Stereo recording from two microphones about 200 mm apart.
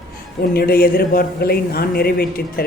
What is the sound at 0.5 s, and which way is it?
Speech, 50° left (ahead or behind).